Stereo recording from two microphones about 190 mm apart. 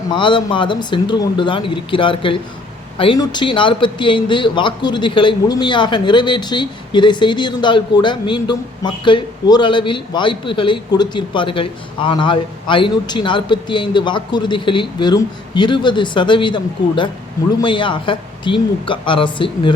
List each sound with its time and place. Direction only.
0.1 s a man's voice: 25° left (ahead or behind)